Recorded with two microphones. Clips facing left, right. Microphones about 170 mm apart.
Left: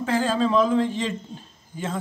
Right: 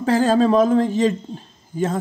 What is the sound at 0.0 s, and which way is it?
A man's voice, 40° right (ahead or behind).